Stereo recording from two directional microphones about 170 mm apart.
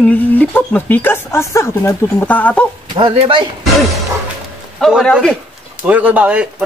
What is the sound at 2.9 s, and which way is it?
Speech, 35° right (ahead or behind).